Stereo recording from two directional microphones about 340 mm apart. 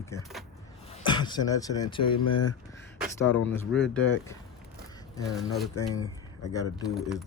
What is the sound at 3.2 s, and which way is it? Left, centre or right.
Speech, left.